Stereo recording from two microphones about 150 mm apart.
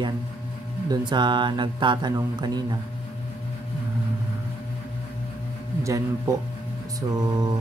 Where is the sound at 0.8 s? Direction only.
30° right (ahead or behind).